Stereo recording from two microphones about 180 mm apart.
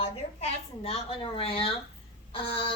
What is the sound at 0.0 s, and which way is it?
A woman's voice, 35° left (ahead or behind).